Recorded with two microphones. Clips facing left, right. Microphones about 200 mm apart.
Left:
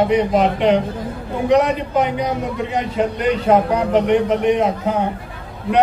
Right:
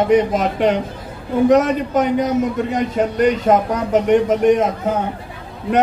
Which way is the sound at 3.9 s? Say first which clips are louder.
Right 4 dB; 45° right (ahead or behind).